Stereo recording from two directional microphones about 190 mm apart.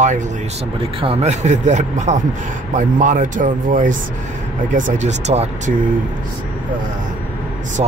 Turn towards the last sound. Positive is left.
turn(degrees=-30)  # may be behind; listen again after turning